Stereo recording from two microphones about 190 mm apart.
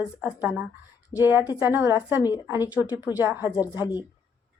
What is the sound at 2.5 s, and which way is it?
Speech, 10° right (ahead or behind).